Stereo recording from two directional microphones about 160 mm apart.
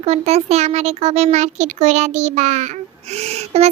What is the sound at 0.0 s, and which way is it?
A child's voice, 40° right (ahead or behind).